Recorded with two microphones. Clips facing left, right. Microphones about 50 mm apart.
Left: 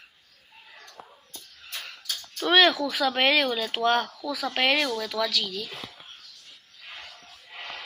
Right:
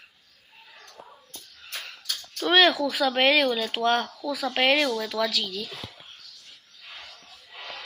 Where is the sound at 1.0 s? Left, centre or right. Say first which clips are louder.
Right 1 dB; left.